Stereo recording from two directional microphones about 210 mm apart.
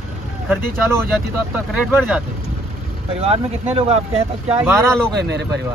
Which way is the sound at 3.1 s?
30° right (ahead or behind).